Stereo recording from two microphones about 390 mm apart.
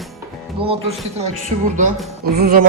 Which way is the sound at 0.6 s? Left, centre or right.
Centre.